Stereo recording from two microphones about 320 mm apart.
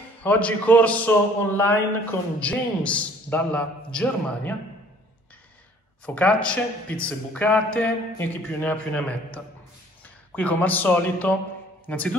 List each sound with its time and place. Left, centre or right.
0.2 s speech: centre
6.0 s a man's voice: centre